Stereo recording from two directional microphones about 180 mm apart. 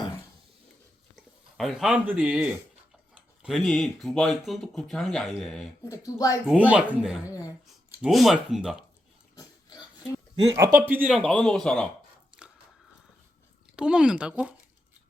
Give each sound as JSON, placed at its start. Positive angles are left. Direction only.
{"t": 1.1, "sound": "speech", "side_deg": 0}
{"t": 5.9, "sound": "speech", "side_deg": 20}
{"t": 6.5, "sound": "speech", "side_deg": -5}
{"t": 7.3, "sound": "a sound", "side_deg": 20}
{"t": 8.0, "sound": "speech", "side_deg": 0}
{"t": 9.3, "sound": "pig", "side_deg": 20}
{"t": 10.5, "sound": "speech", "side_deg": -15}
{"t": 11.0, "sound": "speech", "side_deg": 0}
{"t": 12.4, "sound": "a sound", "side_deg": -5}
{"t": 13.7, "sound": "speech", "side_deg": -5}